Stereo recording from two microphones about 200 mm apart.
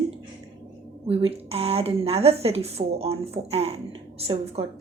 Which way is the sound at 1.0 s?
30° right (ahead or behind).